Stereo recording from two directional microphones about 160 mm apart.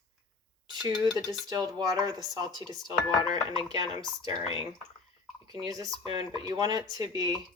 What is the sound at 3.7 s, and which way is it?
Speech, 25° right (ahead or behind).